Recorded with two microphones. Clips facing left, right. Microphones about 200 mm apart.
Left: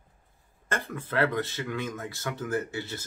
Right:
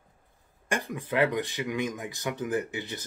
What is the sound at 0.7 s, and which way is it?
Speech, 15° right (ahead or behind).